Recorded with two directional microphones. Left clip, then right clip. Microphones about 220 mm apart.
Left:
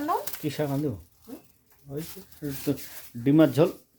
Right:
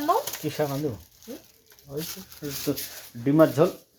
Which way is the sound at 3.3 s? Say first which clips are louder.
Right 1 dB; 25° left (ahead or behind).